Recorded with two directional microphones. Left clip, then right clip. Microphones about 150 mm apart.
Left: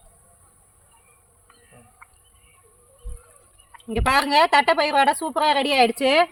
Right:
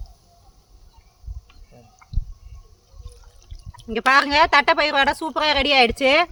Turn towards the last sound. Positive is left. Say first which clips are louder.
# right 1 dB
turn(degrees=15)  # may be behind; listen again after turning